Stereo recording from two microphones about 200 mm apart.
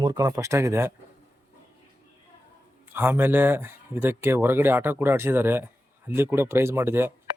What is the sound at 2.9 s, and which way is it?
Speech, 10° right (ahead or behind).